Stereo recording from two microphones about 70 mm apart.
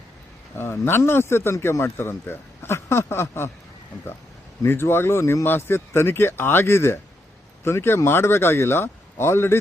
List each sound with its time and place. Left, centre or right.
0.5 s speech: left
4.6 s speech: left